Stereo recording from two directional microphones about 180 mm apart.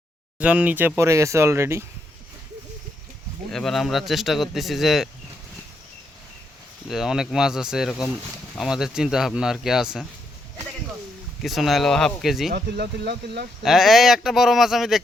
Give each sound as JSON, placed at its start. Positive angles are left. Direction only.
{"t": 0.3, "sound": "speech", "side_deg": -5}
{"t": 3.5, "sound": "speech", "side_deg": 0}
{"t": 6.8, "sound": "speech", "side_deg": 0}
{"t": 11.4, "sound": "speech", "side_deg": 0}
{"t": 12.5, "sound": "speech", "side_deg": -60}
{"t": 13.6, "sound": "speech", "side_deg": 0}